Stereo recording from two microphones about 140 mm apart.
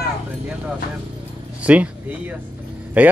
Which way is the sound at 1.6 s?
10° right (ahead or behind).